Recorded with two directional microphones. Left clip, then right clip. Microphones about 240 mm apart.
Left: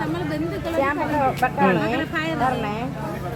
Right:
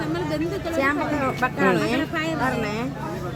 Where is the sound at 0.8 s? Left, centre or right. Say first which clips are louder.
Left 2 dB; right.